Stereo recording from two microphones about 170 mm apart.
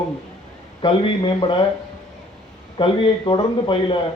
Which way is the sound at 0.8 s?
30° left (ahead or behind).